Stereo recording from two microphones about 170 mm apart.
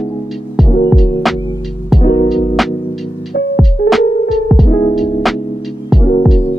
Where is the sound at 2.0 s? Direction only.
25° left (ahead or behind).